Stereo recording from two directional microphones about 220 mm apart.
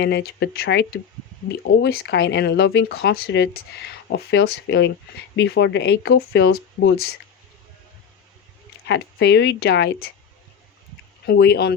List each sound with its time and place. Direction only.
0.0 s speech: 50° left (ahead or behind)
8.9 s speech: 50° left (ahead or behind)
11.3 s speech: 50° left (ahead or behind)